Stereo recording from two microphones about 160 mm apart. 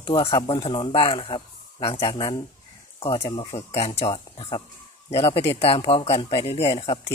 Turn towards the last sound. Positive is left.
turn(degrees=35)  # may be behind; listen again after turning